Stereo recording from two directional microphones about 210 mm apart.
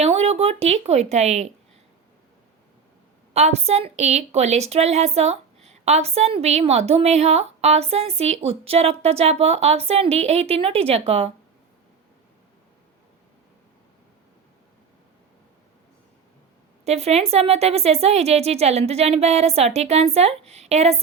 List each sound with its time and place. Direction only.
0.0 s speech: 30° right (ahead or behind)
3.3 s a woman's voice: 30° right (ahead or behind)
16.8 s a woman's voice: 30° right (ahead or behind)